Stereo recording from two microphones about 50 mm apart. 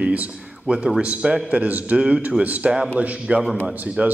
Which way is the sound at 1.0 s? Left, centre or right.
Right.